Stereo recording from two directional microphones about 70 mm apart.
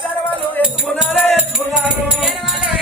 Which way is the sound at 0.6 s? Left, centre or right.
Left.